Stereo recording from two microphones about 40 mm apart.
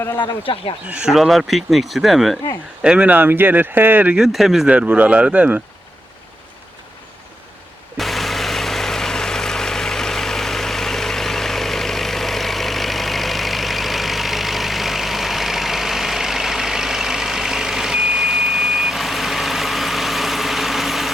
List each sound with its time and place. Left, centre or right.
1.3 s speech: centre
3.0 s speech: right
3.2 s speech: right
4.2 s speech: centre
4.7 s speech: right
7.9 s vehicle: centre